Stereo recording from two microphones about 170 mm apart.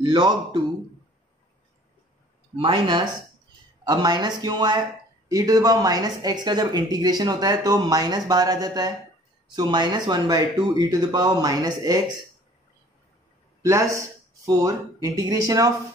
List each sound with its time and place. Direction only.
0.0 s speech: 30° right (ahead or behind)
2.5 s speech: 30° right (ahead or behind)
13.6 s speech: 20° right (ahead or behind)